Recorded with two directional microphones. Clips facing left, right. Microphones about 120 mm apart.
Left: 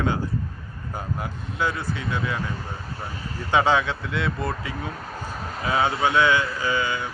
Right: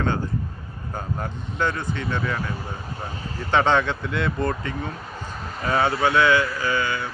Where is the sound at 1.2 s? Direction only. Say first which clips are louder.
Right 1 dB; 5° left (ahead or behind).